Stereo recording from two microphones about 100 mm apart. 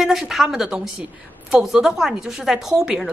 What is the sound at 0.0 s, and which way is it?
Speech, 5° right (ahead or behind).